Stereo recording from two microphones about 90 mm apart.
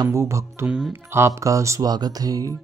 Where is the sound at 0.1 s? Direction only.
35° right (ahead or behind).